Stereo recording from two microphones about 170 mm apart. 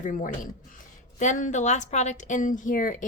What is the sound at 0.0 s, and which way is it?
A woman's voice, 50° left (ahead or behind).